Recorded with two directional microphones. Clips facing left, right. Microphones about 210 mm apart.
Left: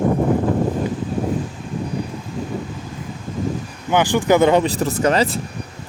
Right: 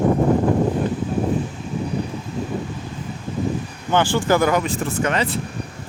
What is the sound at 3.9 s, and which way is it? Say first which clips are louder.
Speech: left 2 dB; 15° left (ahead or behind).